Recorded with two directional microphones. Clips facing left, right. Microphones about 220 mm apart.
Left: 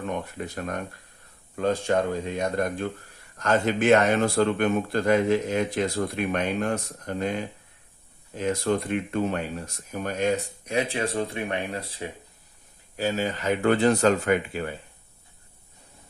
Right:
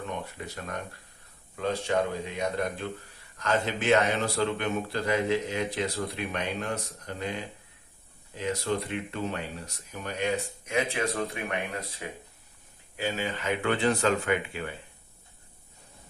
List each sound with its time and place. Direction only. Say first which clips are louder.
0.3 s speech: left 5 dB; 50° left (ahead or behind)
8.4 s speech: left 5 dB; 50° left (ahead or behind); by 12.0 s 30° left (ahead or behind)
13.0 s speech: left 5 dB; 40° left (ahead or behind)